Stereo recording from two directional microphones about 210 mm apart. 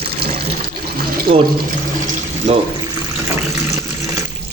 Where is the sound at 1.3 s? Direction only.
25° right (ahead or behind).